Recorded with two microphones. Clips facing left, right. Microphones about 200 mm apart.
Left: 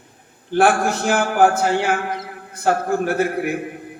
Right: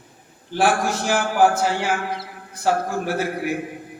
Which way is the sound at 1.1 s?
55° left (ahead or behind).